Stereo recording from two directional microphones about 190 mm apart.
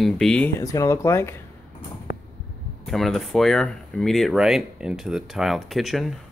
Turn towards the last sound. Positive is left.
turn(degrees=0)  # may be behind; listen again after turning